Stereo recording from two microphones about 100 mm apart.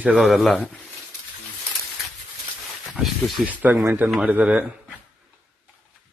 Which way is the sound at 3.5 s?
15° right (ahead or behind).